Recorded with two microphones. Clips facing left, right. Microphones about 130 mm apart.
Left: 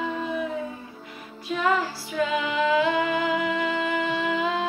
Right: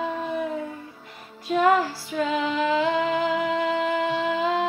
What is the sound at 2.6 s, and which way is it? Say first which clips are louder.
Music: left 1 dB; 40° right (ahead or behind).